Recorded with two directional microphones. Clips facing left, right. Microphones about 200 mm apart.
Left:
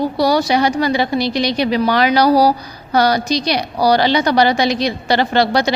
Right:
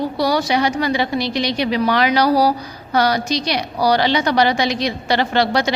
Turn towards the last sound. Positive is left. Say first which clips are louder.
# left 2 dB
turn(degrees=35)  # may be behind; listen again after turning